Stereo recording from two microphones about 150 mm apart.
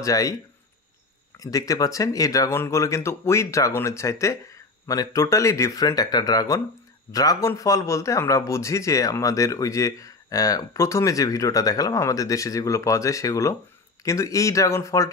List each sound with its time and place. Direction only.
0.0 s speech: 25° left (ahead or behind)
1.4 s speech: 25° left (ahead or behind)